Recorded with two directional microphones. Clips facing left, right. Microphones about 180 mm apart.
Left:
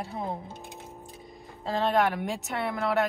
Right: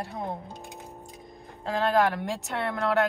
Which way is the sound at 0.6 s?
15° right (ahead or behind).